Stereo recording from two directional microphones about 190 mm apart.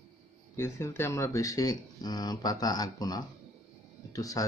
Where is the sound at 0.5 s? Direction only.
15° left (ahead or behind).